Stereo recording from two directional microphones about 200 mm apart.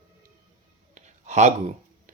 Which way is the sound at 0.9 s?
35° right (ahead or behind).